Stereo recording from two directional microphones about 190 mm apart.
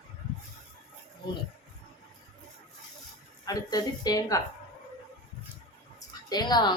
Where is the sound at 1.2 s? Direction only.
20° left (ahead or behind).